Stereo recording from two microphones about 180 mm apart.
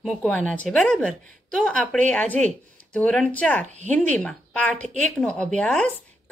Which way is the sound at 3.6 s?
40° right (ahead or behind).